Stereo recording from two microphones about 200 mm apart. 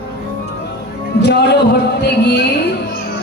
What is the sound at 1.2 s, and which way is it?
Music, 55° left (ahead or behind).